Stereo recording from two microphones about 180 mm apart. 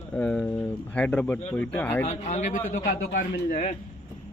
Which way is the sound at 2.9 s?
50° left (ahead or behind).